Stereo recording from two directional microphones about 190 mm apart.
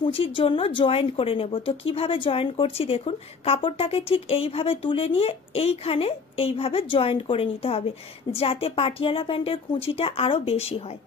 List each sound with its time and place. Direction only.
0.0 s a woman's voice: 30° left (ahead or behind)